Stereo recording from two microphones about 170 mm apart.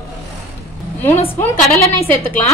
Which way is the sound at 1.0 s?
15° left (ahead or behind).